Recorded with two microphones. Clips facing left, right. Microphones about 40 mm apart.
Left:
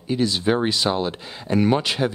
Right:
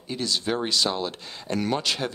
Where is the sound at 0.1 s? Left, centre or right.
Centre.